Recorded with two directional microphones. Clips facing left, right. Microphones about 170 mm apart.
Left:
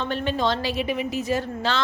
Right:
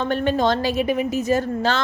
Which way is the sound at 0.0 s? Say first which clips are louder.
Right 5 dB; 50° right (ahead or behind).